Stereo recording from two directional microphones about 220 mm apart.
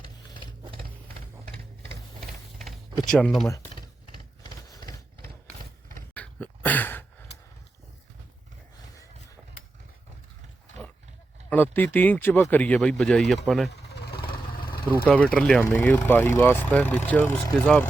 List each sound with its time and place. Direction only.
1.5 s printer: 40° right (ahead or behind)
3.1 s speech: 5° left (ahead or behind)
3.5 s typing: 15° left (ahead or behind)
4.7 s vehicle: 15° left (ahead or behind)
6.1 s a sound: 5° left (ahead or behind)
11.4 s speech: 10° left (ahead or behind)
13.7 s vehicle: 50° left (ahead or behind)
14.3 s vehicle: 20° left (ahead or behind)
15.1 s speech: 5° left (ahead or behind)